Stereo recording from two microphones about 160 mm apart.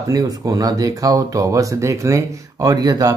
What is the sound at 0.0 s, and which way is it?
Speech, 20° right (ahead or behind).